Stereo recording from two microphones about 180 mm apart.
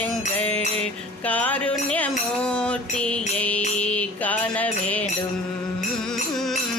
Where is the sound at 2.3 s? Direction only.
5° left (ahead or behind).